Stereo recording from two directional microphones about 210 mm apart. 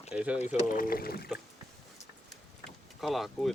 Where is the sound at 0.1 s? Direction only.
5° right (ahead or behind).